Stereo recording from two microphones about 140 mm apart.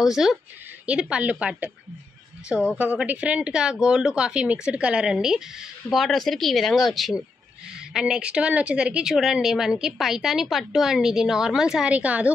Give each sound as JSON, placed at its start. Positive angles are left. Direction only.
{"t": 0.0, "sound": "a woman's voice", "side_deg": -5}